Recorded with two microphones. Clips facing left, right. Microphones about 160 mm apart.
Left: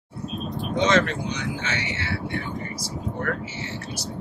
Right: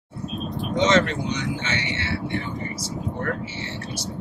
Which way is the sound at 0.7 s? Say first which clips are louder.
Right 1 dB; 25° right (ahead or behind).